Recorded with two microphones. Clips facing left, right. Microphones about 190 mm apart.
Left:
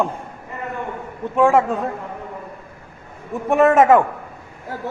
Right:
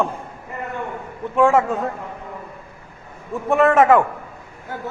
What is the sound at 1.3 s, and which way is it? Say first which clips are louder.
Speech: left 1 dB; 15° left (ahead or behind).